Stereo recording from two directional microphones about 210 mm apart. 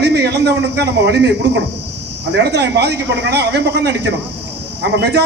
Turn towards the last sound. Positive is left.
turn(degrees=-55)  # may be behind; listen again after turning